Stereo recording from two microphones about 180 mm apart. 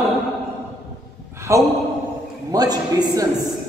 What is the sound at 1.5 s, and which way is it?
A man's voice, 15° right (ahead or behind).